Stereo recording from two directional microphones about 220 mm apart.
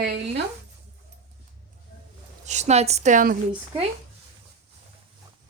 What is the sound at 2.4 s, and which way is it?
Speech, 30° right (ahead or behind).